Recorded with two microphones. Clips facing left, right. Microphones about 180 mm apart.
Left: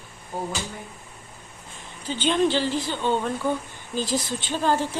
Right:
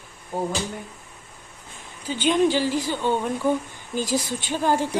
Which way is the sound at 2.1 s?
10° right (ahead or behind).